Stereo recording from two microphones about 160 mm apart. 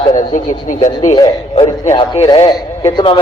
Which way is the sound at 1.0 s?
25° left (ahead or behind).